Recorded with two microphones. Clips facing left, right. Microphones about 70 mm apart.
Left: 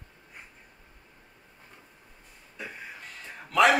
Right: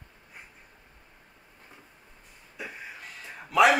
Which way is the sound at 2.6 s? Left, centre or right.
Centre.